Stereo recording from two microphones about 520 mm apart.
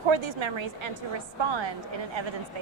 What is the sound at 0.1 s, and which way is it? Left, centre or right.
Speech, right.